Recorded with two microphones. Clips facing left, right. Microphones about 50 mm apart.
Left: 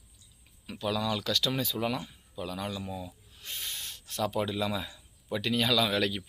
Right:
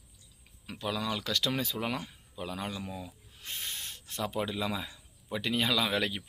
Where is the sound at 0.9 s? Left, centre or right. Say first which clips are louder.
Left 3 dB; right.